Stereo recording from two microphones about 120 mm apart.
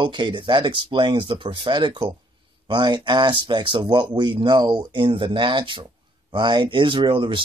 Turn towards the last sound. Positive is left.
turn(degrees=-45)  # may be behind; listen again after turning